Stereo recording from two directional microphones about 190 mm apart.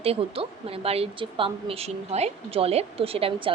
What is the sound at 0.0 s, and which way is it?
A woman's voice, 30° right (ahead or behind).